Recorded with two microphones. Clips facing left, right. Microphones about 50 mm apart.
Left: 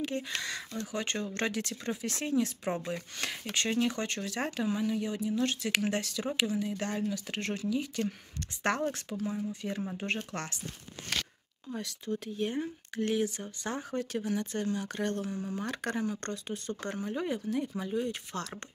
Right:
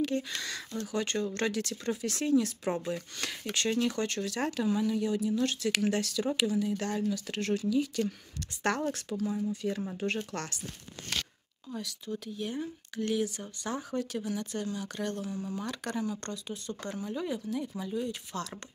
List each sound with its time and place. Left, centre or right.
0.4 s speech: left
12.1 s speech: left